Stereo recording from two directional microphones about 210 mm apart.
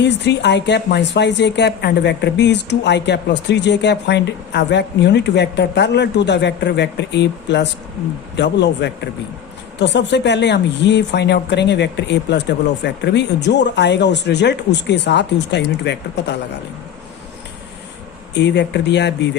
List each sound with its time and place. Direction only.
0.0 s speech: 55° left (ahead or behind)
18.3 s speech: 55° left (ahead or behind)